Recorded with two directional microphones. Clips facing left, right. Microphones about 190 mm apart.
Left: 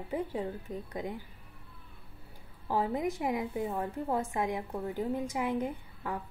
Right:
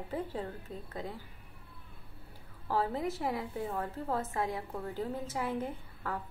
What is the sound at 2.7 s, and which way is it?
A woman's voice, 15° left (ahead or behind).